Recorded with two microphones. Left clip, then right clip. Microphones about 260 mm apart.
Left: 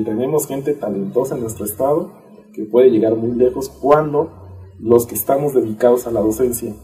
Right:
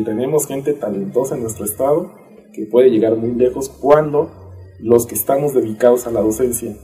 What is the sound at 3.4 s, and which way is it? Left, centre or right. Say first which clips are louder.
Speech: left 1 dB; right.